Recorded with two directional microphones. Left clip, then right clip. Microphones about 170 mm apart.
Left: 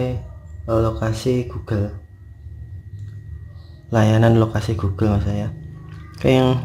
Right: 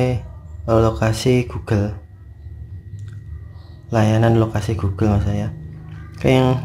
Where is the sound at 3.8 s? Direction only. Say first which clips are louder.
Even; 10° left (ahead or behind).